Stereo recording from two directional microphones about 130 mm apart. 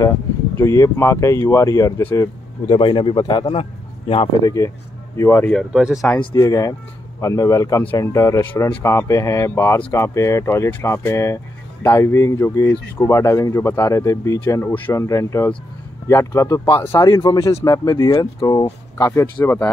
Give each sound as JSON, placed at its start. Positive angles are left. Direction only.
{"t": 0.6, "sound": "speech", "side_deg": 20}
{"t": 2.7, "sound": "speech", "side_deg": 40}
{"t": 4.4, "sound": "speech", "side_deg": 30}
{"t": 5.4, "sound": "speech", "side_deg": 5}
{"t": 5.7, "sound": "speech", "side_deg": -5}
{"t": 6.3, "sound": "speech", "side_deg": 25}
{"t": 19.3, "sound": "speech", "side_deg": 15}